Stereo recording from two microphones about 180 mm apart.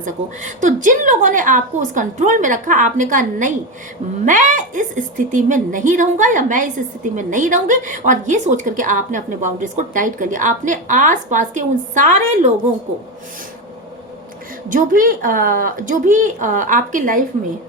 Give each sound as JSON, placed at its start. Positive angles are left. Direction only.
{"t": 0.6, "sound": "a woman's voice", "side_deg": -45}
{"t": 14.7, "sound": "a woman's voice", "side_deg": -50}